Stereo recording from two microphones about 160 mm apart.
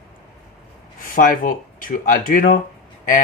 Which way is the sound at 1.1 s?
55° left (ahead or behind).